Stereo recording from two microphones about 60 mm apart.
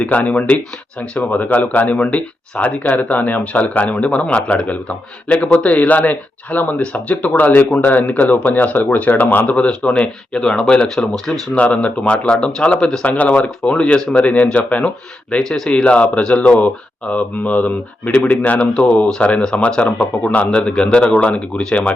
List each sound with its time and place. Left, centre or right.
0.0 s speech: left
9.5 s speech: left
10.4 s speech: centre
11.5 s speech: left
15.4 s speech: centre
15.7 s speech: centre